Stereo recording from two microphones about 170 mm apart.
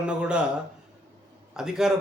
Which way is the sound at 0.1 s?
5° right (ahead or behind).